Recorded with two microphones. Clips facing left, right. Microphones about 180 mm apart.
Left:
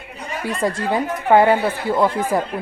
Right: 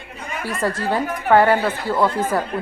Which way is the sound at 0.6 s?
15° left (ahead or behind).